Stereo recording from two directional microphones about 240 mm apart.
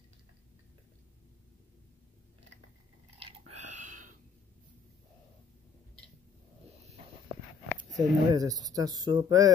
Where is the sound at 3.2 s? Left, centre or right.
Right.